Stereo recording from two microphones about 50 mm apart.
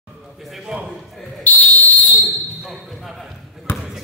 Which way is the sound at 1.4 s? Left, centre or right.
Left.